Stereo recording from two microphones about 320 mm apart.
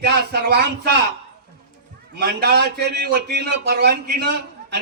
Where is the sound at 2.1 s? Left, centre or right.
Right.